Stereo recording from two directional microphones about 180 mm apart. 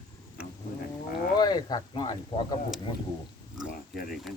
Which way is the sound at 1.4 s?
20° left (ahead or behind).